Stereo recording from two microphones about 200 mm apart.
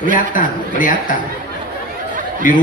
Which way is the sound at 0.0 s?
40° left (ahead or behind).